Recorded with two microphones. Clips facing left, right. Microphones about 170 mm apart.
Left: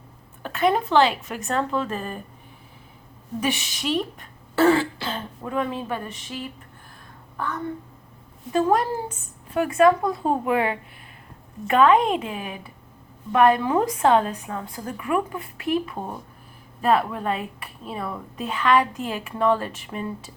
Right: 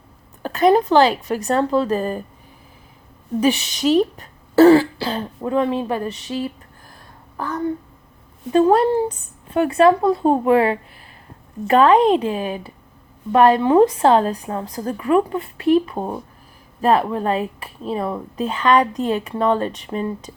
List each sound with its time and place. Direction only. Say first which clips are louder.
0.4 s a woman's voice: right 7 dB; 35° right (ahead or behind)
3.8 s a woman's voice: right 9 dB; 40° right (ahead or behind)
6.3 s a woman's voice: right 9 dB; 45° right (ahead or behind)
8.5 s a woman's voice: right 7 dB; 30° right (ahead or behind)